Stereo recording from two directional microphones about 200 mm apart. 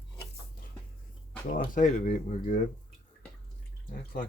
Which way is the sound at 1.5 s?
45° left (ahead or behind).